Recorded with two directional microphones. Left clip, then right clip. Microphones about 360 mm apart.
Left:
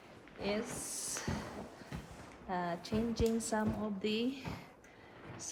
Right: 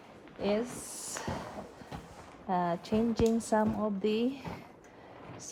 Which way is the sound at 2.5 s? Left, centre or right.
Centre.